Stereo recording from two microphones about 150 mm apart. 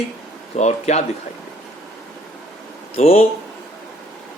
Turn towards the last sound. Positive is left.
turn(degrees=45)  # may be behind; listen again after turning